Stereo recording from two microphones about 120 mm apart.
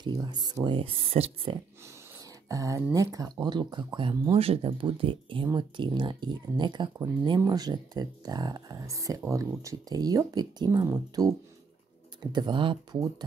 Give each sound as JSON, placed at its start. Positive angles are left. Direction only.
{"t": 0.0, "sound": "speech", "side_deg": -35}
{"t": 2.4, "sound": "speech", "side_deg": -25}
{"t": 4.3, "sound": "speech", "side_deg": -55}